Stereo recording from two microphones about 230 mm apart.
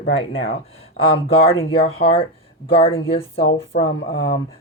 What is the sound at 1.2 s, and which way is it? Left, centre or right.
Speech, left.